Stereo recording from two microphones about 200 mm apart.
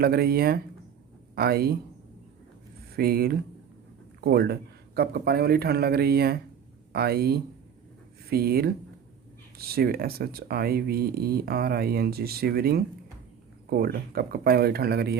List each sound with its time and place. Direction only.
0.0 s speech: 50° right (ahead or behind)
2.9 s speech: 50° right (ahead or behind)